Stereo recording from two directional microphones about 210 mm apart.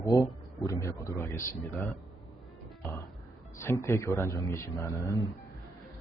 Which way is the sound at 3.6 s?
10° left (ahead or behind).